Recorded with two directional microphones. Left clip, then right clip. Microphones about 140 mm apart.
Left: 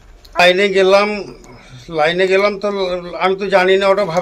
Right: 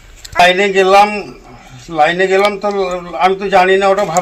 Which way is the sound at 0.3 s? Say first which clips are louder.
Right 2 dB; 35° left (ahead or behind).